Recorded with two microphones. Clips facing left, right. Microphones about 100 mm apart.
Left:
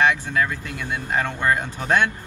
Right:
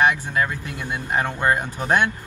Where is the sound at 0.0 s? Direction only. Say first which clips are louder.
Even; 25° right (ahead or behind).